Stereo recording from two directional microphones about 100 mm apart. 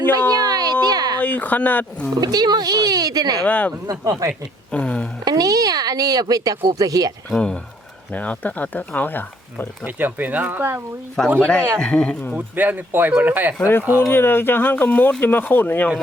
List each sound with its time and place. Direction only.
0.3 s a sound: 40° right (ahead or behind)
1.2 s speech: 15° left (ahead or behind)
2.2 s speech: 40° right (ahead or behind)
3.4 s speech: 15° left (ahead or behind)
3.8 s speech: 35° right (ahead or behind)
4.7 s a sound: 10° left (ahead or behind)
5.2 s speech: 35° right (ahead or behind)
7.3 s speech: 5° left (ahead or behind)
9.8 s speech: 20° right (ahead or behind)
11.3 s speech: 10° left (ahead or behind)
12.5 s speech: 20° right (ahead or behind)
14.1 s speech: 20° left (ahead or behind)